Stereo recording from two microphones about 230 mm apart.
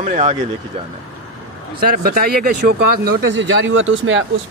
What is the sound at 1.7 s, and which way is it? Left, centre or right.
Speech, right.